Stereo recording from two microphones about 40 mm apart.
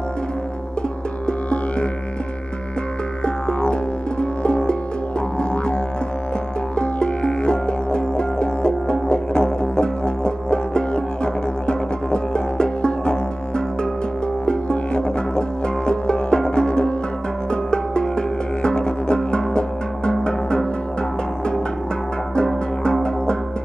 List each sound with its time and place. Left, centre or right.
1.2 s music: left
4.2 s music: left
6.8 s music: left
14.4 s music: left
22.3 s music: left